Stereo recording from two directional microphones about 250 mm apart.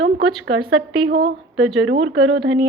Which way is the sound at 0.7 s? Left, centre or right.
Right.